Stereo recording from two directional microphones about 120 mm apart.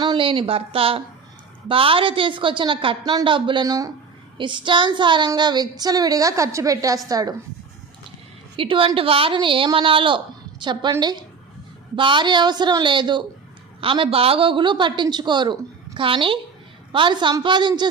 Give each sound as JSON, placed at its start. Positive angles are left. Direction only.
{"t": 0.0, "sound": "a woman's voice", "side_deg": -40}
{"t": 3.0, "sound": "a woman's voice", "side_deg": -30}
{"t": 3.2, "sound": "a woman's voice", "side_deg": -45}
{"t": 4.4, "sound": "a woman's voice", "side_deg": -40}
{"t": 8.5, "sound": "a woman's voice", "side_deg": -45}